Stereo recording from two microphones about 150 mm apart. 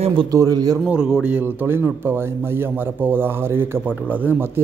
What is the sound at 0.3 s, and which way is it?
Speech, 25° right (ahead or behind).